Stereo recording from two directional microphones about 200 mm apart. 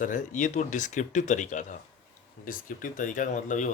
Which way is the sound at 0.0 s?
40° left (ahead or behind).